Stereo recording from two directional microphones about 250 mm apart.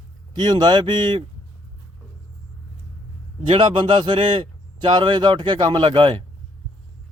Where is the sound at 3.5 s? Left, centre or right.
Centre.